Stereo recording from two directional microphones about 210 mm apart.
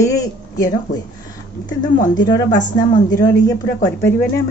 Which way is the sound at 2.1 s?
20° left (ahead or behind).